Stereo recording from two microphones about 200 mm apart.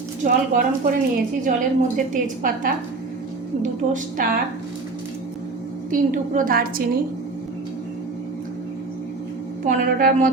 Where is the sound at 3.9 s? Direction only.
45° right (ahead or behind).